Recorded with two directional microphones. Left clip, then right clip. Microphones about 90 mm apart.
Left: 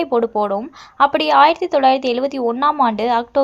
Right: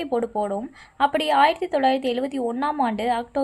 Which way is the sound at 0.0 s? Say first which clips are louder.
Left 7 dB; 20° left (ahead or behind).